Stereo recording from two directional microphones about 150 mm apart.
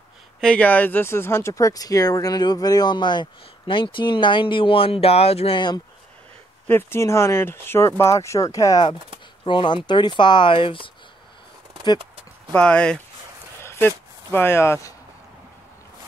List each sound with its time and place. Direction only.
0.4 s speech: 10° left (ahead or behind); by 5.6 s 45° left (ahead or behind)
6.7 s speech: 15° left (ahead or behind); by 10.9 s 35° left (ahead or behind)
12.5 s speech: 5° left (ahead or behind)
13.6 s a sound: 15° left (ahead or behind)